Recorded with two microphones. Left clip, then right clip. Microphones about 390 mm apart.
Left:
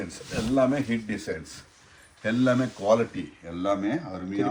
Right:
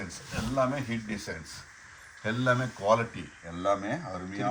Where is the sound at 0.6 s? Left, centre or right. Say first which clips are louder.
Left 4 dB; centre.